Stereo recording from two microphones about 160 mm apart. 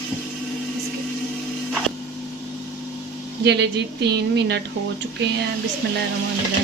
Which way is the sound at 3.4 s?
90° right.